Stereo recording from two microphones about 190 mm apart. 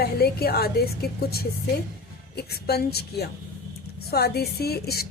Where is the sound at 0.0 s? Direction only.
55° left (ahead or behind).